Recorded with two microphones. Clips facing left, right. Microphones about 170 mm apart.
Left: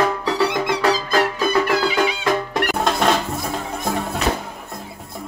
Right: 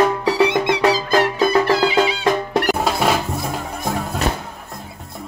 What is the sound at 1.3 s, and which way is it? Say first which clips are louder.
Music: right 3 dB; 30° right (ahead or behind).